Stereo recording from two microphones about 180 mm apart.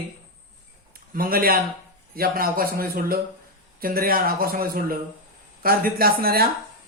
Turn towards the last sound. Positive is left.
turn(degrees=-55)  # may be behind; listen again after turning